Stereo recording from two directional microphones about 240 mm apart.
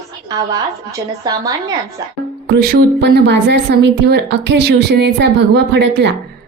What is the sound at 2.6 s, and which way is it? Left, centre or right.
A woman's voice, right.